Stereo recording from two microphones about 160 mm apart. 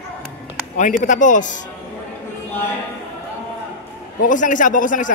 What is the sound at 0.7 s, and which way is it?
Speech, 50° left (ahead or behind).